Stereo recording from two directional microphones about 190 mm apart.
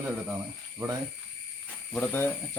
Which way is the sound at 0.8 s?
15° right (ahead or behind).